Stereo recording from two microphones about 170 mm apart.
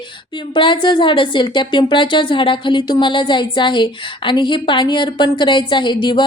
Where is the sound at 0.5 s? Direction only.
30° left (ahead or behind).